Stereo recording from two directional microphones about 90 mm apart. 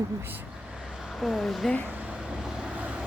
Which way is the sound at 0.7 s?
10° right (ahead or behind).